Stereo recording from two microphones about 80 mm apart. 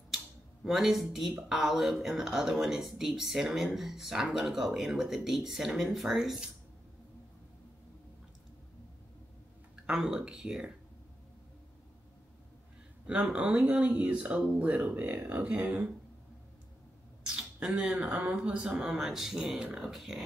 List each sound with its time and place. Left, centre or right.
0.7 s speech: centre
9.8 s speech: centre
13.0 s speech: centre
17.3 s speech: centre